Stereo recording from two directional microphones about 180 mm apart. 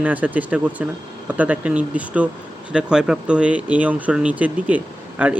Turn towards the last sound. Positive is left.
turn(degrees=-10)  # may be behind; listen again after turning